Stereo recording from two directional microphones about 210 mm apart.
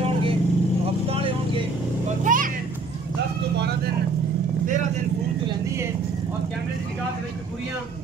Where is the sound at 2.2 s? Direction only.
40° right (ahead or behind).